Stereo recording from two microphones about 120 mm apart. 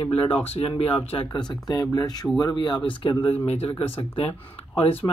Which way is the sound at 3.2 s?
55° left (ahead or behind).